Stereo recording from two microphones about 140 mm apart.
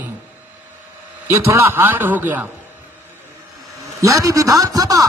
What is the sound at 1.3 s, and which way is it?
A man's voice, 20° right (ahead or behind).